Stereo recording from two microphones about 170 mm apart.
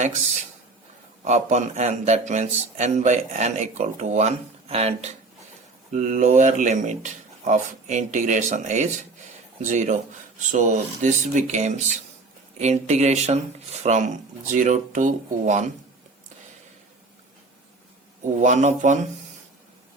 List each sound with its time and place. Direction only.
1.2 s speech: 45° right (ahead or behind)
18.3 s speech: 45° right (ahead or behind)